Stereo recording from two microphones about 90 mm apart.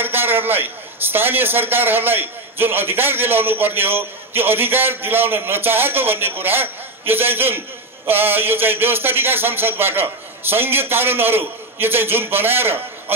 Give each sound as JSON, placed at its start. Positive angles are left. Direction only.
{"t": 0.0, "sound": "a man's voice", "side_deg": -25}